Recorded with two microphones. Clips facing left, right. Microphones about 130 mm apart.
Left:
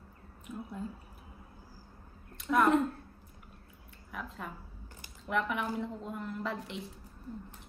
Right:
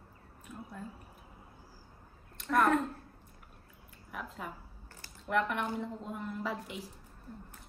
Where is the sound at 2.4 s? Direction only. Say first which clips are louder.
Left 3 dB; centre (ahead or behind).